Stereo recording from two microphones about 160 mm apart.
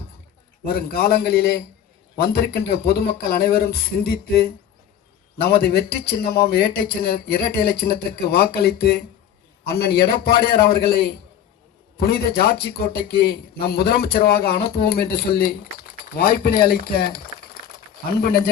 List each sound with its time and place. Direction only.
0.9 s a man's voice: 75° left (ahead or behind)
11.9 s a man's voice: 80° left
18.2 s a man's voice: 75° left (ahead or behind)